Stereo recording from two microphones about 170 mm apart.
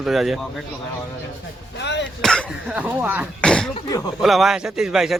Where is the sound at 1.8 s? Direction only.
90° left.